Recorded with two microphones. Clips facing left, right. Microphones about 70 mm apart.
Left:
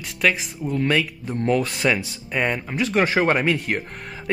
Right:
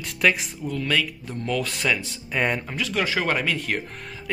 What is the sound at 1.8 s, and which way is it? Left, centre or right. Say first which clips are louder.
Speech: left 4 dB; centre.